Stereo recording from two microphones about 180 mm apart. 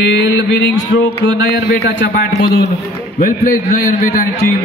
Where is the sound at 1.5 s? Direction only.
70° left (ahead or behind).